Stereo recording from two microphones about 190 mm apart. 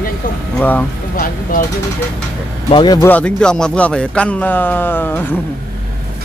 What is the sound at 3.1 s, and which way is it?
Speech, 5° left (ahead or behind).